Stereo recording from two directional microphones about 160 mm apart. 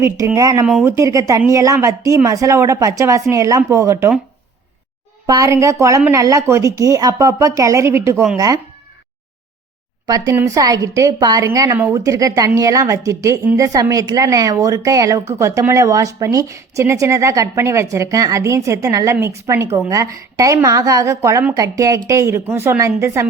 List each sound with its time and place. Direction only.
0.0 s speech: 20° right (ahead or behind)
5.2 s speech: 20° right (ahead or behind)
10.1 s speech: 20° right (ahead or behind)